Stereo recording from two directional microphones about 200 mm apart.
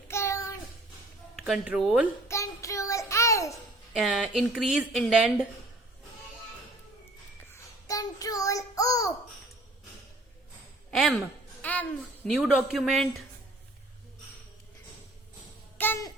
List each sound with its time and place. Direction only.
0.1 s child singing: 15° left (ahead or behind)
1.4 s speech: 5° right (ahead or behind)
2.2 s child singing: 15° left (ahead or behind)
3.9 s speech: centre (ahead or behind)
7.5 s a sound: 15° left (ahead or behind)
10.9 s a sound: centre (ahead or behind)
15.8 s babbling: 15° left (ahead or behind)